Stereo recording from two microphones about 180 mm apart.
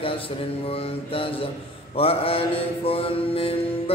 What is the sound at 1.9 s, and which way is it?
Mantra, 30° left (ahead or behind).